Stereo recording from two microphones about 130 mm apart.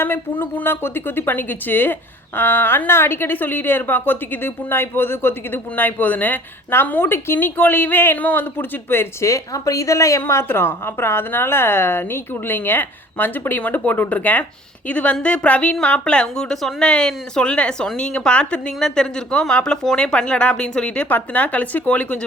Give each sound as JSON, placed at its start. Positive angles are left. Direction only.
{"t": 0.0, "sound": "a woman's voice", "side_deg": 15}